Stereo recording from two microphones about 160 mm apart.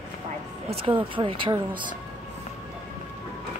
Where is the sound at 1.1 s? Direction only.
30° right (ahead or behind).